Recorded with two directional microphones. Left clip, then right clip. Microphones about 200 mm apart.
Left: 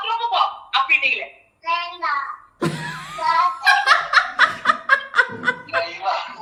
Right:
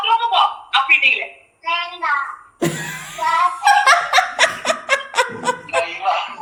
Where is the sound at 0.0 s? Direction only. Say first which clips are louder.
Right 5 dB; 5° left (ahead or behind).